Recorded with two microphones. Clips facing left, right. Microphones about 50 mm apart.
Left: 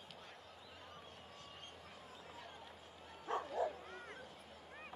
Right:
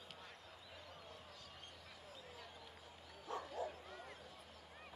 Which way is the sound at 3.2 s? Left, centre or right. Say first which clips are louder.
Left 6 dB; left.